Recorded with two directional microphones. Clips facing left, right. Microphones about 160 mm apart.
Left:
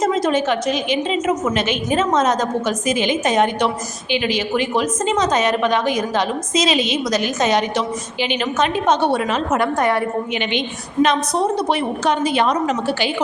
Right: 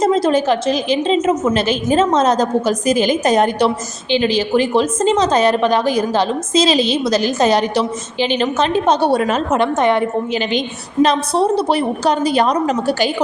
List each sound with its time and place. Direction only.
0.0 s a woman's voice: 30° right (ahead or behind)
9.6 s a woman's voice: 20° right (ahead or behind)
11.0 s a woman's voice: 35° right (ahead or behind)